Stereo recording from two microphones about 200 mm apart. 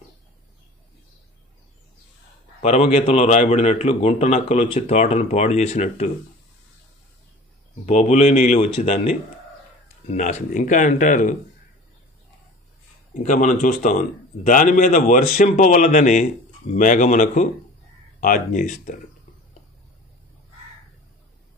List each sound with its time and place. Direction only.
2.6 s a man's voice: 30° left (ahead or behind)
7.8 s a man's voice: 35° left (ahead or behind)
13.1 s a man's voice: 40° left (ahead or behind)